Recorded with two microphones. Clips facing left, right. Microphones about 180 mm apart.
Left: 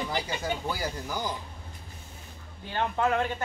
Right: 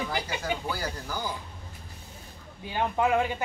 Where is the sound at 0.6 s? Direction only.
10° left (ahead or behind).